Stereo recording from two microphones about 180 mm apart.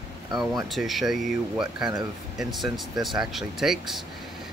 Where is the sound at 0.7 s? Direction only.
Centre (ahead or behind).